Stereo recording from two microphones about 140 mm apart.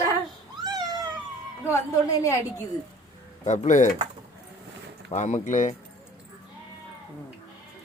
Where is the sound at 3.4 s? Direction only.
60° left (ahead or behind).